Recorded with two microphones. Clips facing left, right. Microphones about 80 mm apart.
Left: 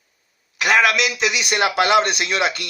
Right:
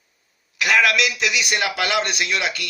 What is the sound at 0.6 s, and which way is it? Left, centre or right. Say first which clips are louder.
A man's voice: left 1 dB; left.